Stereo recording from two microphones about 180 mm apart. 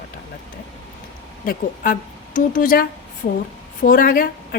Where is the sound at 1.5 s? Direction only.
50° left (ahead or behind).